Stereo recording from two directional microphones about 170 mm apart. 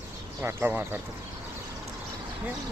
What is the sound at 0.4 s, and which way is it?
Speech, 10° right (ahead or behind).